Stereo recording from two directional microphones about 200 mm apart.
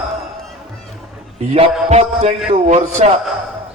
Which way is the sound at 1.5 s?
30° right (ahead or behind).